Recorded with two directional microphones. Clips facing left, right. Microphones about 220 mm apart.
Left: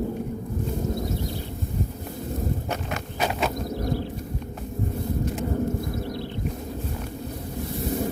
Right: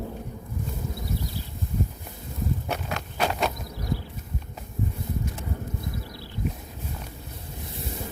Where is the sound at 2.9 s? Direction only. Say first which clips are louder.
Right 1 dB; 5° left (ahead or behind).